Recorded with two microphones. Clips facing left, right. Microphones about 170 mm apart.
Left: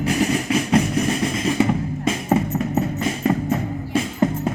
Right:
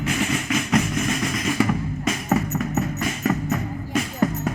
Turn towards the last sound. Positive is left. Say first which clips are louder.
# left 2 dB
turn(degrees=30)  # may be behind; listen again after turning